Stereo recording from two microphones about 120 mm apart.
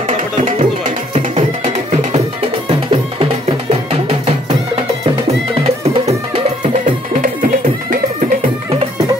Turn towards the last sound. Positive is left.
turn(degrees=-75)  # may be behind; listen again after turning